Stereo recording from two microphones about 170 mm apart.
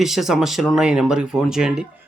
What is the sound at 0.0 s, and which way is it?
Speech, centre (ahead or behind).